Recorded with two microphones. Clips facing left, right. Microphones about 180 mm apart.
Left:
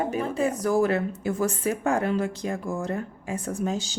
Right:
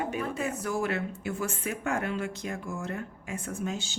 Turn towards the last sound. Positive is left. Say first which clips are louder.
# left 6 dB
turn(degrees=35)  # may be behind; listen again after turning